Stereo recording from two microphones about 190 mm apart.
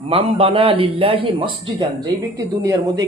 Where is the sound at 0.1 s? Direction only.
30° right (ahead or behind).